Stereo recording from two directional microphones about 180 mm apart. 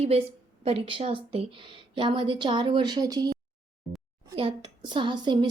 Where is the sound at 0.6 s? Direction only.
30° right (ahead or behind).